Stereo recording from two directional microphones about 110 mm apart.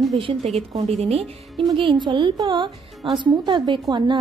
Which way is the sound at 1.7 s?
45° right (ahead or behind).